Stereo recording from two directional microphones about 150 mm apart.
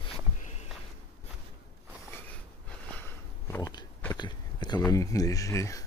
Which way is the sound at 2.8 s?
10° left (ahead or behind).